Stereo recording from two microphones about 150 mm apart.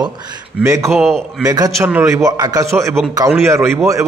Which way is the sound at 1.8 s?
15° right (ahead or behind).